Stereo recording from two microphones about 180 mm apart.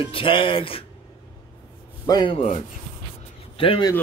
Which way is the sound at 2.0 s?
25° left (ahead or behind).